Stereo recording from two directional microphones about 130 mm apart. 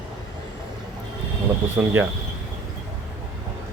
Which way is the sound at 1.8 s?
5° right (ahead or behind).